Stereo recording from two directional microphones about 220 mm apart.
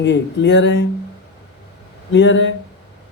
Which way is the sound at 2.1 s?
55° left (ahead or behind).